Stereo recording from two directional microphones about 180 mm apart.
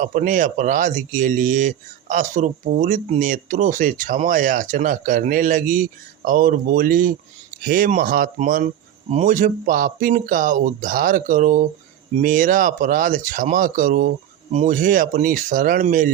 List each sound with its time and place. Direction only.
0.0 s speech: 45° right (ahead or behind)